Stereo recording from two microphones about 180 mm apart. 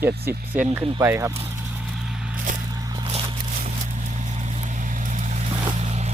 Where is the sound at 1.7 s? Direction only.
5° right (ahead or behind).